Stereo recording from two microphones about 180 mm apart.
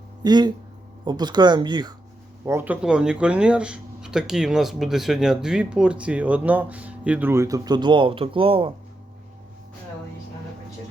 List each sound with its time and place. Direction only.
0.2 s speech: 25° right (ahead or behind)
2.5 s speech: 10° right (ahead or behind); by 8.7 s 30° right (ahead or behind)